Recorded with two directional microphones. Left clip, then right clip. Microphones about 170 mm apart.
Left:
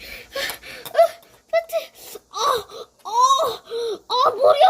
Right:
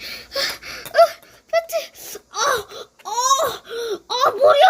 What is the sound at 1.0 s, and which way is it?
Wail, 15° right (ahead or behind).